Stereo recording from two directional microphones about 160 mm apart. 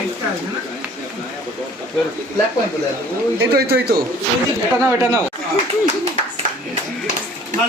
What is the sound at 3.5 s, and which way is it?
Speech, 80° right.